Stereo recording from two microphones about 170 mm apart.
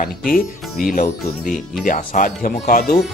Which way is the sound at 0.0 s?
55° left (ahead or behind).